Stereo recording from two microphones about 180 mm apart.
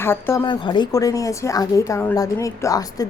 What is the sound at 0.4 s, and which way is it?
A woman's voice, 25° left (ahead or behind).